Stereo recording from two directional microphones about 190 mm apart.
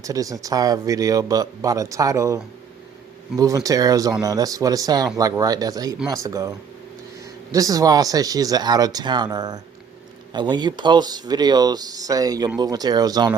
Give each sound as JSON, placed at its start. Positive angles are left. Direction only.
{"t": 0.0, "sound": "speech", "side_deg": -15}